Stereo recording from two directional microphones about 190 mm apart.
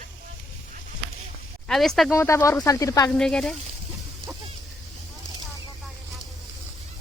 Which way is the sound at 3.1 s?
5° left (ahead or behind).